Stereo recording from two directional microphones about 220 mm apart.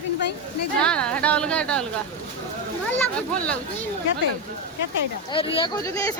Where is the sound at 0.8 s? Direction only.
5° left (ahead or behind).